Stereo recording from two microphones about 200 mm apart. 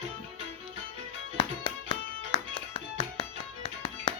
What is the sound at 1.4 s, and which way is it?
Music, 25° left (ahead or behind).